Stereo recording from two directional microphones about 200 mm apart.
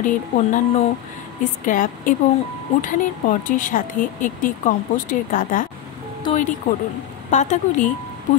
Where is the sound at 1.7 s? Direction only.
40° left (ahead or behind).